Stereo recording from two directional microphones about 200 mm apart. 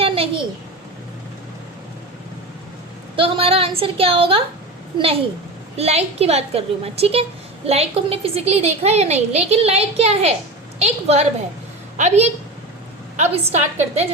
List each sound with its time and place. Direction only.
0.0 s a sound: 25° right (ahead or behind)
3.2 s a woman's voice: 30° right (ahead or behind)
5.7 s a woman's voice: 30° right (ahead or behind)